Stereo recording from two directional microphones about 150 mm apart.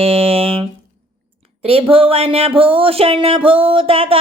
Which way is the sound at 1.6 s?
40° right (ahead or behind).